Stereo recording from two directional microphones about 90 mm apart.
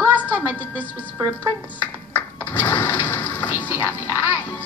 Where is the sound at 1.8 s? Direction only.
20° left (ahead or behind).